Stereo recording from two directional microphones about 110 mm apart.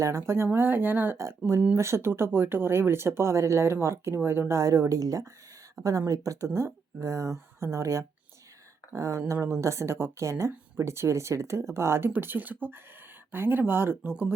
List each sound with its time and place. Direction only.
0.0 s speech: 25° right (ahead or behind)